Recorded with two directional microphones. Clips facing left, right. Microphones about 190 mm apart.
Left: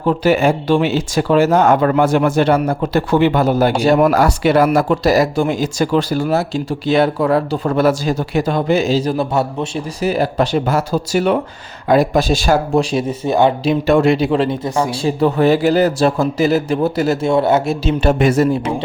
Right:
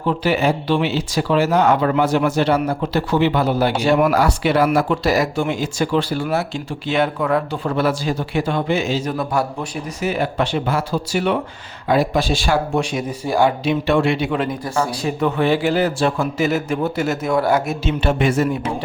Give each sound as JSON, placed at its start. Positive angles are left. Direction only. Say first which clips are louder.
{"t": 0.0, "sound": "speech", "louder": "left 4 dB", "side_deg": 45}
{"t": 10.0, "sound": "speech", "louder": "left 4 dB", "side_deg": 35}
{"t": 13.7, "sound": "speech", "louder": "left 4 dB", "side_deg": 40}
{"t": 17.8, "sound": "speech", "louder": "left 5 dB", "side_deg": 40}